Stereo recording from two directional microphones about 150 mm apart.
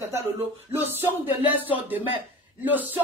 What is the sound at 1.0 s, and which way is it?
Speech, 15° right (ahead or behind).